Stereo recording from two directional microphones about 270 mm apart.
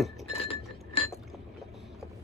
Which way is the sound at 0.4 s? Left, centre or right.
Centre.